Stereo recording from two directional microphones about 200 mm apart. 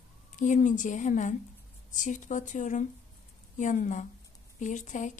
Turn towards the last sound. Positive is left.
turn(degrees=40)  # may be behind; listen again after turning